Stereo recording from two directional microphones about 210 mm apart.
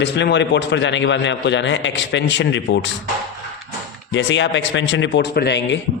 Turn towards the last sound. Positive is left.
turn(degrees=55)  # may be behind; listen again after turning